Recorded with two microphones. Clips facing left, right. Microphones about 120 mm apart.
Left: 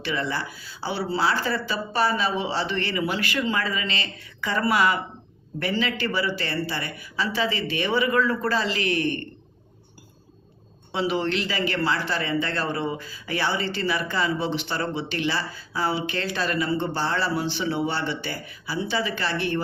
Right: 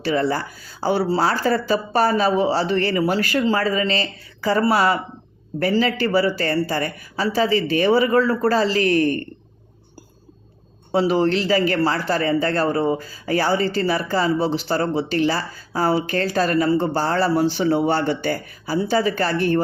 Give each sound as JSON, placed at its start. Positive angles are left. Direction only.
{"t": 0.0, "sound": "speech", "side_deg": -40}
{"t": 10.9, "sound": "speech", "side_deg": -40}